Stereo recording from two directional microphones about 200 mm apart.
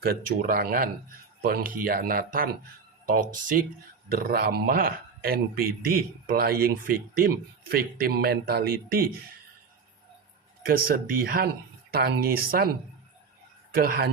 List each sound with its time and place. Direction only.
0.0 s speech: 50° right (ahead or behind)
10.7 s speech: 45° right (ahead or behind)